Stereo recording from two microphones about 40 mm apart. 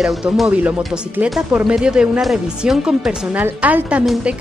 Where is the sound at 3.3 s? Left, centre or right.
Right.